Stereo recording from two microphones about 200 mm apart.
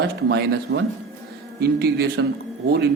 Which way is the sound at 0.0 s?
55° right (ahead or behind).